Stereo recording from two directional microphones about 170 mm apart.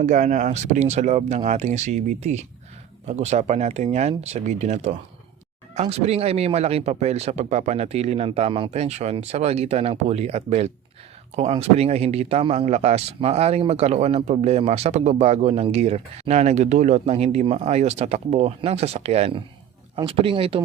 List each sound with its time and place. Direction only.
0.0 s speech: 45° right (ahead or behind)